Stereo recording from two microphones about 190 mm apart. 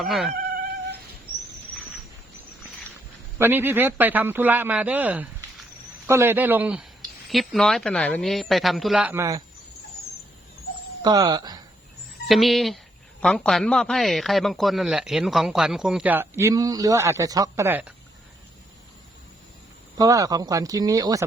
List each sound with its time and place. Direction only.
0.0 s a man's voice: centre (ahead or behind)
3.3 s a man's voice: 10° right (ahead or behind)
11.0 s speech: 20° right (ahead or behind)
12.3 s a man's voice: centre (ahead or behind)
20.0 s speech: 20° right (ahead or behind)